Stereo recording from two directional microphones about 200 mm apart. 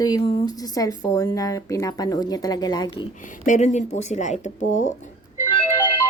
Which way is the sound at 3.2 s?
40° left (ahead or behind).